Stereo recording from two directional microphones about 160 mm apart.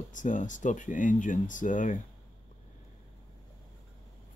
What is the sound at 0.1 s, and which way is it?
Speech, 50° left (ahead or behind).